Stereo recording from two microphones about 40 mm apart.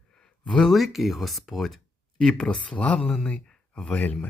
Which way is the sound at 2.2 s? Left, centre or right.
Centre.